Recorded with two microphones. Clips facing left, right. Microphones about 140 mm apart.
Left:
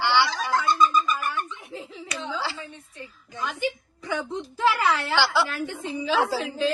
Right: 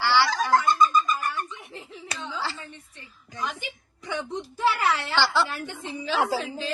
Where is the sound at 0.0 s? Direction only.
20° left (ahead or behind).